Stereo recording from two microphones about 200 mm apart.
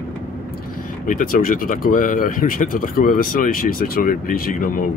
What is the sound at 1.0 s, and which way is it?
Speech, 45° left (ahead or behind).